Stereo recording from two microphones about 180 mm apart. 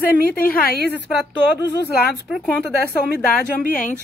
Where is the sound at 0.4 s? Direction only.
55° left (ahead or behind).